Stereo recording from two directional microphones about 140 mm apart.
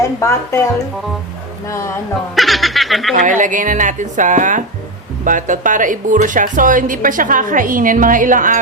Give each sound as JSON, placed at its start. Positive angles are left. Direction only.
{"t": 0.0, "sound": "speech", "side_deg": 20}
{"t": 2.3, "sound": "speech", "side_deg": 0}
{"t": 3.2, "sound": "a woman's voice", "side_deg": -65}